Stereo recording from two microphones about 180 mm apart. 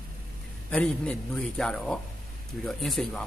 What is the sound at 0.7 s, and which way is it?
Speech, 5° left (ahead or behind).